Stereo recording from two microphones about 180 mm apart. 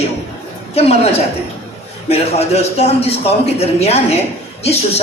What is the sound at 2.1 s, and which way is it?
A woman's voice, 35° left (ahead or behind).